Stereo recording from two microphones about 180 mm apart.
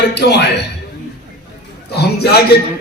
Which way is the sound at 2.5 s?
65° left (ahead or behind).